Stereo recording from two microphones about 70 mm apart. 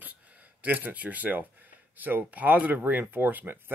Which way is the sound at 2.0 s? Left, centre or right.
Right.